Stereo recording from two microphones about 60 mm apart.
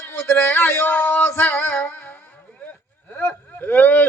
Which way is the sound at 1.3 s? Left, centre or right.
Left.